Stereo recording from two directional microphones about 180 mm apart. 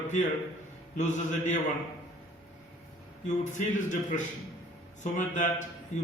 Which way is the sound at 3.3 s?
45° left (ahead or behind).